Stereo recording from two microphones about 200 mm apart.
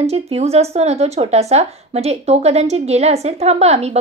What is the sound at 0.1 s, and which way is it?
Speech, 30° right (ahead or behind).